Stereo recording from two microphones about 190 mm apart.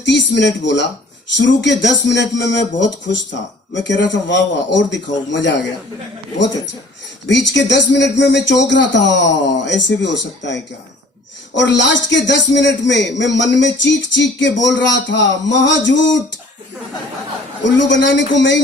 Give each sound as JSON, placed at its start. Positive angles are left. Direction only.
{"t": 0.0, "sound": "a man's voice", "side_deg": 70}
{"t": 7.3, "sound": "a man's voice", "side_deg": 70}
{"t": 17.6, "sound": "a man's voice", "side_deg": 70}